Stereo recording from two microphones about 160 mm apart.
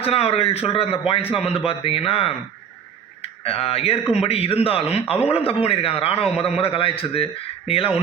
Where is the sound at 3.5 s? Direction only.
35° left (ahead or behind).